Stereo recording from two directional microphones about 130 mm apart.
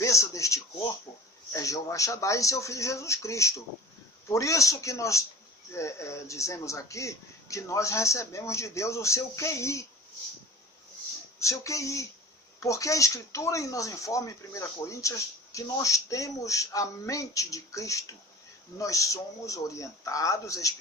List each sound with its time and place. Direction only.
0.0 s a sound: 25° left (ahead or behind)
1.5 s speech: 25° left (ahead or behind)
11.3 s speech: 25° left (ahead or behind)